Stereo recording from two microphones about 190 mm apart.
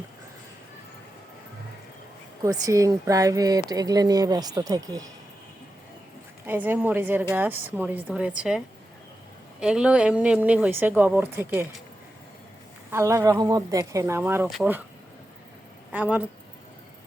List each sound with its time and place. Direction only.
2.4 s speech: 15° right (ahead or behind)
6.4 s speech: 10° right (ahead or behind)
12.9 s speech: 15° right (ahead or behind)
15.9 s speech: 10° right (ahead or behind)